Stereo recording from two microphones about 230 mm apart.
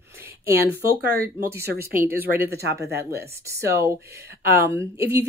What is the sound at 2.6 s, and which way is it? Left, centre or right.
Speech, right.